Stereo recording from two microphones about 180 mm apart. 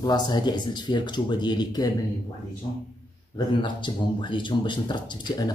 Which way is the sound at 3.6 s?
25° left (ahead or behind).